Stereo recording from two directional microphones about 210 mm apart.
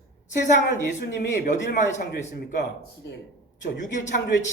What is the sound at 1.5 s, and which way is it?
Speech, 40° left (ahead or behind).